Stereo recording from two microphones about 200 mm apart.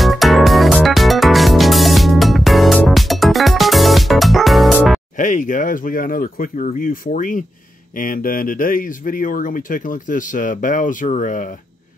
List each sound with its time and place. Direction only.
0.0 s music: centre (ahead or behind)
5.2 s speech: 40° left (ahead or behind)